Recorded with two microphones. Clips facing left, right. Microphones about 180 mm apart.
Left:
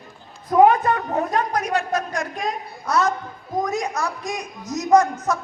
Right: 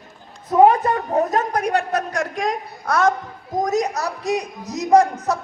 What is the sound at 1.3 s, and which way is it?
A woman's voice, 50° right (ahead or behind).